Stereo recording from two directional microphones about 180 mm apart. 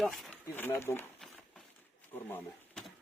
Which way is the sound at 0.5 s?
10° left (ahead or behind).